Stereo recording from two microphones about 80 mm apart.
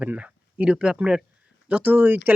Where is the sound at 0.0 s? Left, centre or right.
Centre.